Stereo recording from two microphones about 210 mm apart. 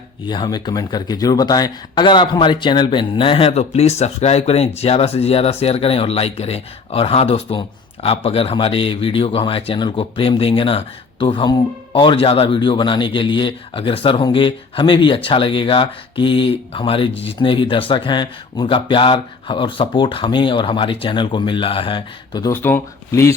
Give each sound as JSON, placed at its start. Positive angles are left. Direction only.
{"t": 0.3, "sound": "speech", "side_deg": 20}
{"t": 22.5, "sound": "speech", "side_deg": 10}